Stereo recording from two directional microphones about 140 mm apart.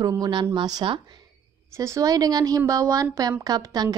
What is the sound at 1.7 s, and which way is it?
Speech, 20° right (ahead or behind).